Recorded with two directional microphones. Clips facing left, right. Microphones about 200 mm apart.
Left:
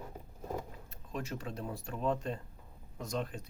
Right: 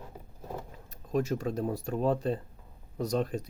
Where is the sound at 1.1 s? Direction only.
40° right (ahead or behind).